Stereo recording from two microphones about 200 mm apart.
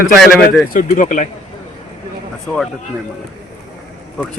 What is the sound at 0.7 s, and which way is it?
Speech, 40° left (ahead or behind).